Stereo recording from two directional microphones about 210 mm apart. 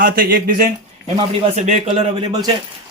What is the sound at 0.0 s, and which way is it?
A man's voice, 45° right (ahead or behind).